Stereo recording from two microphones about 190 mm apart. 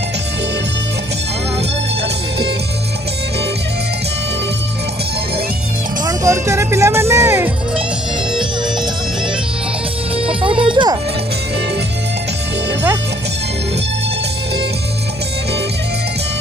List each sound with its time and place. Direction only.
6.0 s music: 15° right (ahead or behind)
10.2 s music: 30° right (ahead or behind)